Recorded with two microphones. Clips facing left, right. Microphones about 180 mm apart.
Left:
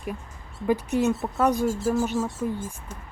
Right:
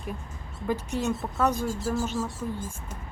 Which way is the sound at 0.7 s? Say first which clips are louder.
Left 5 dB; 5° left (ahead or behind).